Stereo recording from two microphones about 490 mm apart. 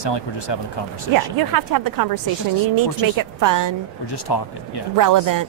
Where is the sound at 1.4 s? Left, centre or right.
Right.